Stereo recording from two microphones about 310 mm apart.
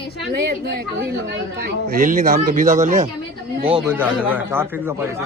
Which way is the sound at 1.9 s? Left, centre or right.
Right.